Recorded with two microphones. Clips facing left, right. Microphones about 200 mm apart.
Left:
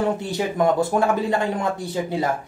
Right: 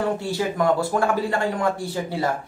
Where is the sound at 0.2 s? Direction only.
20° left (ahead or behind).